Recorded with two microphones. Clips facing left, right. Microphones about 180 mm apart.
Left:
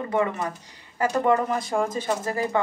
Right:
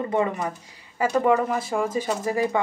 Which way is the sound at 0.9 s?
10° right (ahead or behind).